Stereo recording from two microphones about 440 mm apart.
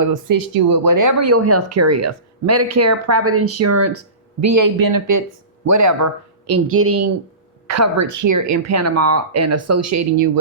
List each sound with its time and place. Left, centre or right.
0.0 s speech: right